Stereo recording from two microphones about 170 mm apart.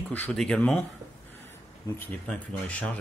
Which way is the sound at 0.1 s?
5° left (ahead or behind).